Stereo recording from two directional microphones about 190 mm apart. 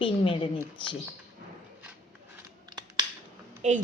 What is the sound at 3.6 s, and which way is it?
Speech, 40° right (ahead or behind).